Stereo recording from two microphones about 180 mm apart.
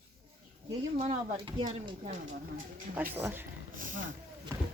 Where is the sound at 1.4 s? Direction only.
25° right (ahead or behind).